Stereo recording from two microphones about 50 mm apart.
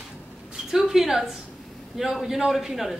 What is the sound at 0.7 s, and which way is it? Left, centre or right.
A woman's voice, centre.